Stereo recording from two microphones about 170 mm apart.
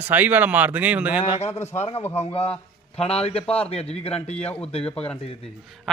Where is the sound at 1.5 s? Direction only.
15° left (ahead or behind).